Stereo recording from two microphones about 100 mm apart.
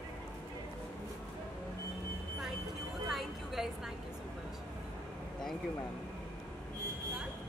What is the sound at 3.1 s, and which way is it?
Vehicle, 5° right (ahead or behind).